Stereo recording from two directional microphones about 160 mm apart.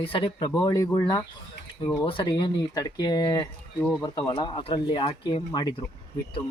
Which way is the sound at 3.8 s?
5° left (ahead or behind).